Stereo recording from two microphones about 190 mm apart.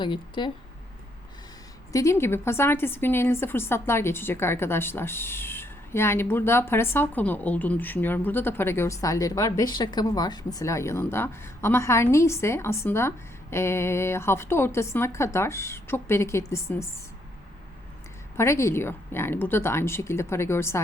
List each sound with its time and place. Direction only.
0.0 s a woman's voice: 25° left (ahead or behind)
1.9 s a woman's voice: 15° left (ahead or behind)
18.3 s a woman's voice: 15° left (ahead or behind)